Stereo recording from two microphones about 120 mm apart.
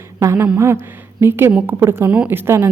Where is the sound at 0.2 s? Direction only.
25° right (ahead or behind).